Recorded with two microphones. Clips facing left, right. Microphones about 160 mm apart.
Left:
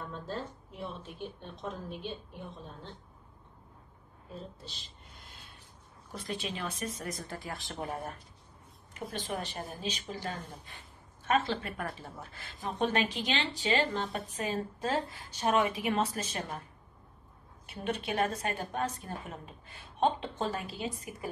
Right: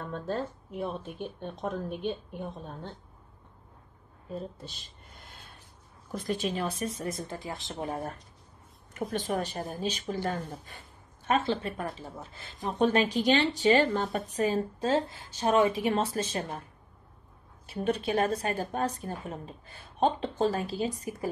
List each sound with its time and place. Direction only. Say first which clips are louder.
0.3 s a woman's voice: right 8 dB; 55° right (ahead or behind)
4.6 s a sound: right 2 dB; 50° right (ahead or behind)
6.1 s a woman's voice: right 7 dB; 45° right (ahead or behind); by 8.0 s 25° right (ahead or behind)
8.9 s a woman's voice: right 6 dB; 45° right (ahead or behind)
11.2 s a woman's voice: right 2 dB; 30° right (ahead or behind)
12.6 s a woman's voice: right 5 dB; 35° right (ahead or behind)
17.6 s a woman's voice: right 6 dB; 35° right (ahead or behind)